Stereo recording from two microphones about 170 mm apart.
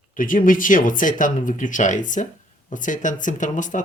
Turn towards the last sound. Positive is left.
turn(degrees=50)  # may be behind; listen again after turning